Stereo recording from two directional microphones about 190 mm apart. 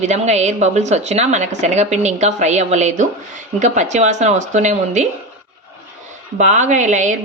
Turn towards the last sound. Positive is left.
turn(degrees=-40)  # may be behind; listen again after turning